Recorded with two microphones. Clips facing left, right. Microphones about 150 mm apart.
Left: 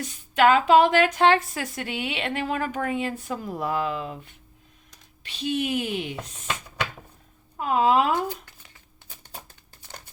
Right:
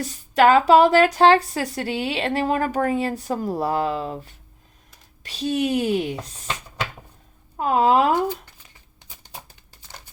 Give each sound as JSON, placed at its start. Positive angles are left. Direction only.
{"t": 0.0, "sound": "speech", "side_deg": -40}
{"t": 7.5, "sound": "speech", "side_deg": -40}